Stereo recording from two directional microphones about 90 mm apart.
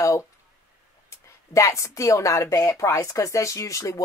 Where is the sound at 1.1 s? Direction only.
35° left (ahead or behind).